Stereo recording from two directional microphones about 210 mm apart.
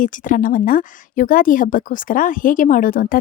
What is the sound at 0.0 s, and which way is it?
Speech, 40° left (ahead or behind).